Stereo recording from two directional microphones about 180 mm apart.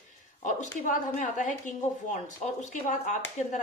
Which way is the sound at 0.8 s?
45° left (ahead or behind).